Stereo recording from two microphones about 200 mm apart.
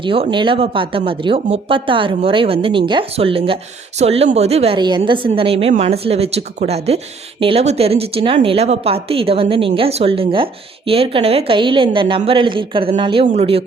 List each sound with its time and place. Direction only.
0.0 s speech: 25° right (ahead or behind)